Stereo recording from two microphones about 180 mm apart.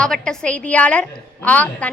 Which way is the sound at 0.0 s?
5° left (ahead or behind).